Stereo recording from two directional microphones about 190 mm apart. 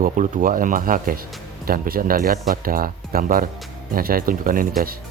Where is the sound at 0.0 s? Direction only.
45° right (ahead or behind).